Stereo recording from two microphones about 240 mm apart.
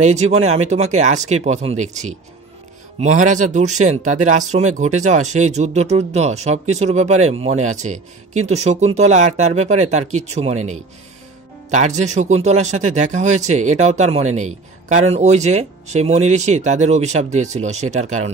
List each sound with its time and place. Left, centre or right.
0.0 s speech: right